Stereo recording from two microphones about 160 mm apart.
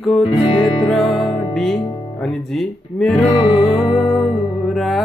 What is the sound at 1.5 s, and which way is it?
Speech, centre (ahead or behind).